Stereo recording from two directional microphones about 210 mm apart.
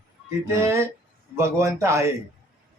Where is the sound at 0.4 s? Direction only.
15° right (ahead or behind).